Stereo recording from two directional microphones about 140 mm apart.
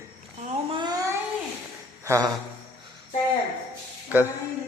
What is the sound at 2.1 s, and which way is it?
Speech, 25° right (ahead or behind).